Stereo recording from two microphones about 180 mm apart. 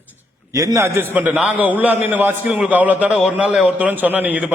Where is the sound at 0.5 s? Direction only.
20° right (ahead or behind).